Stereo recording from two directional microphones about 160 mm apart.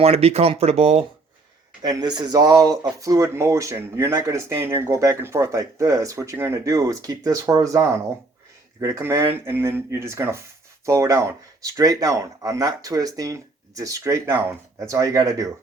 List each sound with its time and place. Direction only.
0.0 s speech: 40° right (ahead or behind)
1.8 s speech: 25° right (ahead or behind)